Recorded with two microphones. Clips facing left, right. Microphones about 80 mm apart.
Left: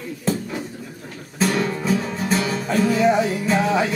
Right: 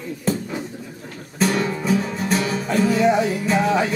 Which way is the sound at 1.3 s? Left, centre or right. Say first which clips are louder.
Even; centre.